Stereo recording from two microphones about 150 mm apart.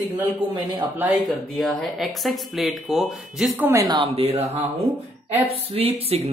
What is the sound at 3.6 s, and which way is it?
Speech, 20° right (ahead or behind).